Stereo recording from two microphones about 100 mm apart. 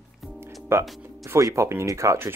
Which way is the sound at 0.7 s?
25° right (ahead or behind).